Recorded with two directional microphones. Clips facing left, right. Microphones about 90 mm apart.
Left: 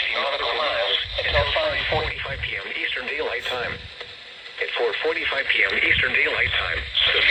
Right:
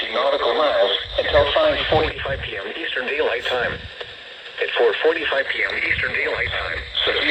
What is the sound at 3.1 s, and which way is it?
Radio, 55° right (ahead or behind).